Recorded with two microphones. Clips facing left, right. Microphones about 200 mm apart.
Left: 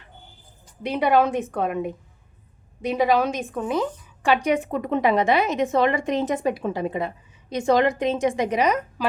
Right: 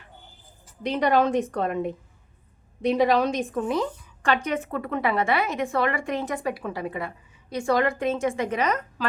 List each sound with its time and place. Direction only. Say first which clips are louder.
0.9 s a woman's voice: left 2 dB; 5° left (ahead or behind)
4.4 s a woman's voice: left 5 dB; 15° left (ahead or behind)